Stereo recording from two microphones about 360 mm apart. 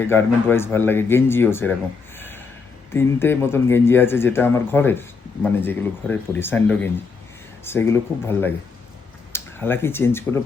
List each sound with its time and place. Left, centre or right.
0.1 s speech: centre
2.1 s a sound: centre
2.9 s speech: centre